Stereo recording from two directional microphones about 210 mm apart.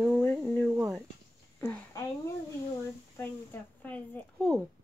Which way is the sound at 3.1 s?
10° left (ahead or behind).